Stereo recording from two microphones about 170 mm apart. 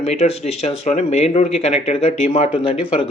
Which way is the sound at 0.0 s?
40° left (ahead or behind).